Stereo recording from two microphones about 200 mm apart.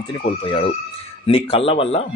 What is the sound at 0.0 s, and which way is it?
Speech, 25° left (ahead or behind).